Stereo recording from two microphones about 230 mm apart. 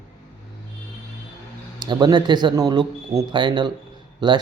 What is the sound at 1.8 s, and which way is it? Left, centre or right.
Speech, centre.